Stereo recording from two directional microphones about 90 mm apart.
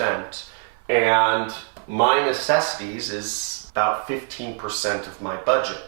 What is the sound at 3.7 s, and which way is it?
Speech, 20° right (ahead or behind).